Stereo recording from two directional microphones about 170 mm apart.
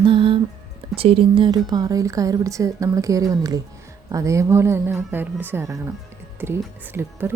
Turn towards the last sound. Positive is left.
turn(degrees=-10)  # may be behind; listen again after turning